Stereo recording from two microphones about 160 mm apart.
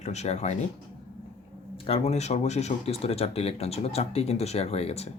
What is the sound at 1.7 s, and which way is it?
Speech, 35° left (ahead or behind).